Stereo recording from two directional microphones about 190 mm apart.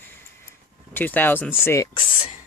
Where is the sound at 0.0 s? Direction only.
10° left (ahead or behind).